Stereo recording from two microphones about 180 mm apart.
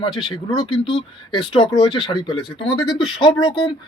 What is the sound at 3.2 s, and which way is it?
Speech, 25° left (ahead or behind).